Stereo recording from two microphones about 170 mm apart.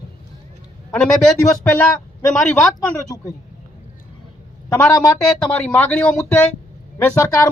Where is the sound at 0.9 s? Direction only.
5° left (ahead or behind).